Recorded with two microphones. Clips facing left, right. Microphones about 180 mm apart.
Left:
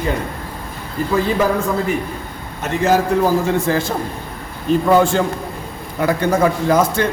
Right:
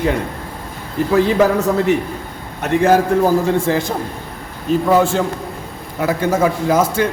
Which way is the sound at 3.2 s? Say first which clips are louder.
Right 2 dB; 20° right (ahead or behind).